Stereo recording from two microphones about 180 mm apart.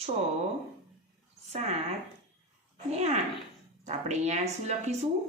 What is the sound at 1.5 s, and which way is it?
Speech, 35° right (ahead or behind).